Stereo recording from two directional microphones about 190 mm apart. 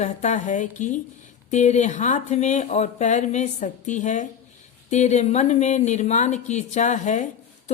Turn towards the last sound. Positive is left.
turn(degrees=40)  # may be behind; listen again after turning